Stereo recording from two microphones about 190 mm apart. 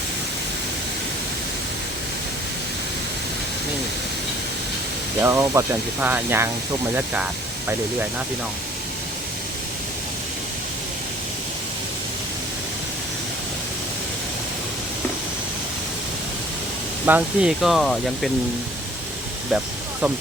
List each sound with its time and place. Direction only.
5.2 s speech: 15° right (ahead or behind)
17.1 s speech: 5° right (ahead or behind)
19.5 s snake: 5° right (ahead or behind)